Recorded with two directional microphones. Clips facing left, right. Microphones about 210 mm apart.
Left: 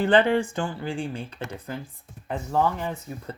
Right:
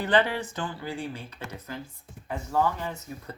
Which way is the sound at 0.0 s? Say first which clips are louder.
Left 5 dB; 30° left (ahead or behind).